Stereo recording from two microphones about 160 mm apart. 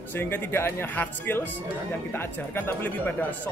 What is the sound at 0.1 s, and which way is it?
A man's voice, 10° left (ahead or behind).